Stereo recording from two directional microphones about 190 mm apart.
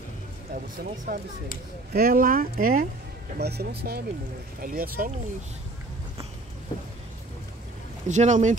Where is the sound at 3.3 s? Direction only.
60° right (ahead or behind).